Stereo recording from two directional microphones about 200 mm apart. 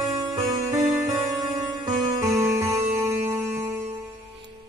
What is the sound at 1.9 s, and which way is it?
Music, 20° right (ahead or behind).